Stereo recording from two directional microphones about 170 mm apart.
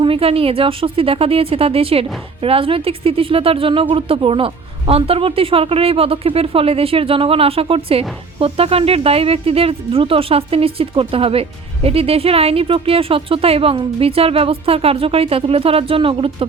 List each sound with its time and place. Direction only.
0.0 s speech: 35° right (ahead or behind)